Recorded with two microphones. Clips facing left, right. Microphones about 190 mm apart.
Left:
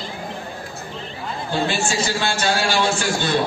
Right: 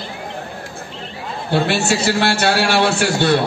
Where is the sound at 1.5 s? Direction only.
65° right (ahead or behind).